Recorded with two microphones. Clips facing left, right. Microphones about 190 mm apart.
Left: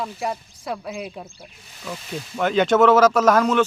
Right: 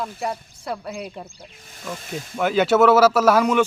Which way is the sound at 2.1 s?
5° right (ahead or behind).